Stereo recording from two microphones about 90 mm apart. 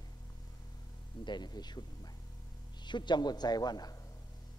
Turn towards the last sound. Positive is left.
turn(degrees=45)  # may be behind; listen again after turning